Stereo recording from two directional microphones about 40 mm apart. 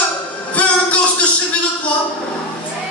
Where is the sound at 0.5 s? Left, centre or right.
Left.